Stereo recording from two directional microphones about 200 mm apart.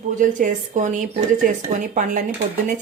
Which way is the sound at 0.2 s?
40° right (ahead or behind).